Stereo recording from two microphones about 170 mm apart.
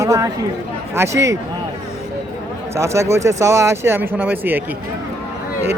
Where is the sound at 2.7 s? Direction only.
15° right (ahead or behind).